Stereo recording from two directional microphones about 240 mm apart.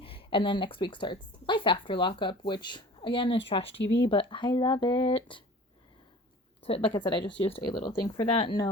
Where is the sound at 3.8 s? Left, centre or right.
Left.